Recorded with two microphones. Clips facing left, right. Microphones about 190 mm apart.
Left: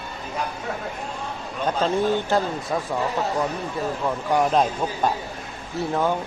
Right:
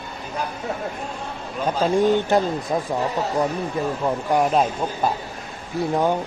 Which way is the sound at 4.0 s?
10° right (ahead or behind).